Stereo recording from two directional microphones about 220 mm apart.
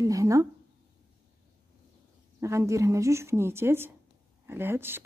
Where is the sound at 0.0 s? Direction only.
15° right (ahead or behind).